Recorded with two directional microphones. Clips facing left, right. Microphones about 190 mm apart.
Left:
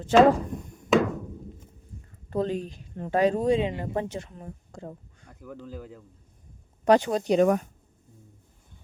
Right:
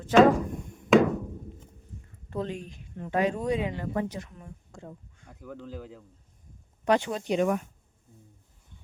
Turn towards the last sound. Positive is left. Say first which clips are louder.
# left 5 dB
turn(degrees=40)  # may be behind; listen again after turning